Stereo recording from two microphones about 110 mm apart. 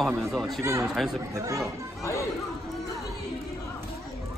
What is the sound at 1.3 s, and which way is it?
Speech, 25° right (ahead or behind).